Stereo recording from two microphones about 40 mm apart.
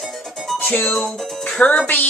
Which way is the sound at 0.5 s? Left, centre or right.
Left.